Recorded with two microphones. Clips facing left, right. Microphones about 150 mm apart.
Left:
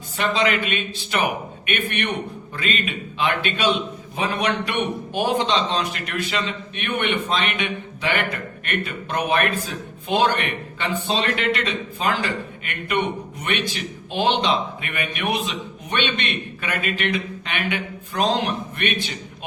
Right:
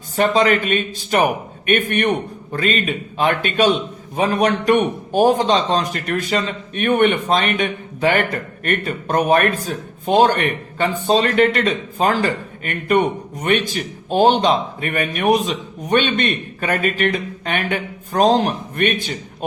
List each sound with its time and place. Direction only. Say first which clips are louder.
0.2 s a man's voice: right 6 dB; 45° right (ahead or behind)